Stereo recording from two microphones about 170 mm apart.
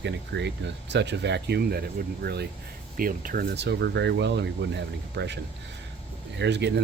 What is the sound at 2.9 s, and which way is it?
Speech, 55° right (ahead or behind).